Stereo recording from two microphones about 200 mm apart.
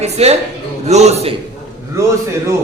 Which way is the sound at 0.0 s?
30° right (ahead or behind).